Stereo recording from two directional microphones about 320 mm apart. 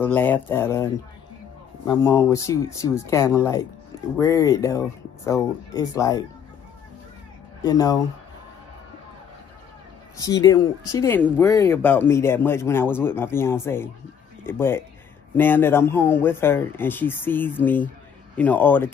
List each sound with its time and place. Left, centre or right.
0.0 s speech: centre
1.9 s speech: centre
7.6 s speech: centre
10.1 s speech: centre